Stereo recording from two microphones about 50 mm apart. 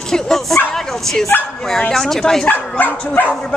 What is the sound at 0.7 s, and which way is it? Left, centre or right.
Bow-wow, centre.